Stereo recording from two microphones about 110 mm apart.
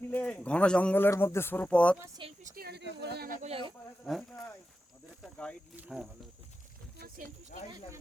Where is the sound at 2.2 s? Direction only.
50° right (ahead or behind).